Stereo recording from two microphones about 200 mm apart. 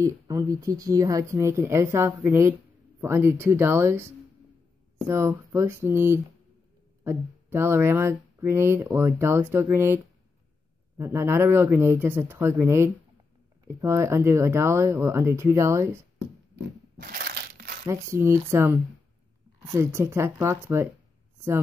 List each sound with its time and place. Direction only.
0.0 s speech: 15° right (ahead or behind)
11.0 s speech: 15° right (ahead or behind)
16.2 s crushing: 55° right (ahead or behind)
17.8 s speech: 15° right (ahead or behind)